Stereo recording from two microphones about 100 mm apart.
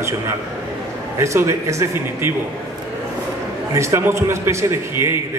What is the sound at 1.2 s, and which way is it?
A man's voice, 30° right (ahead or behind).